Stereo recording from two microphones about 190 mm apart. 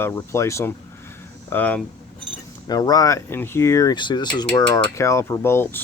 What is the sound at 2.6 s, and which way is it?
Speech, 20° left (ahead or behind).